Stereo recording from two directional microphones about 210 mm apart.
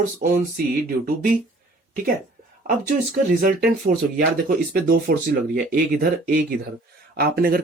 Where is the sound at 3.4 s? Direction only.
40° right (ahead or behind).